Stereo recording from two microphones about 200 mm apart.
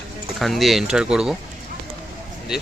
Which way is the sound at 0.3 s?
Centre (ahead or behind).